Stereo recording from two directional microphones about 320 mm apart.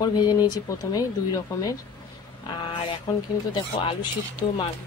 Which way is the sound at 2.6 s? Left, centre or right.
Centre.